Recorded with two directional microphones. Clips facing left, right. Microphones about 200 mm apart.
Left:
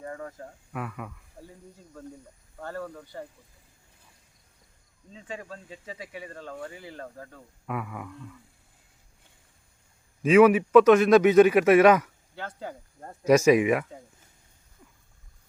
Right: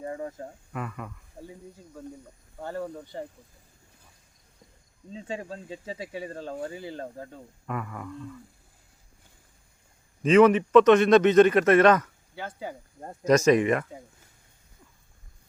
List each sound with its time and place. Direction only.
0.0 s speech: 25° right (ahead or behind)
0.7 s speech: 5° left (ahead or behind)
2.0 s speech: 10° right (ahead or behind)
5.1 s speech: 30° right (ahead or behind)
7.7 s speech: 5° left (ahead or behind)
10.2 s a man's voice: 10° left (ahead or behind)
12.3 s speech: 10° right (ahead or behind)
13.2 s a man's voice: 10° left (ahead or behind)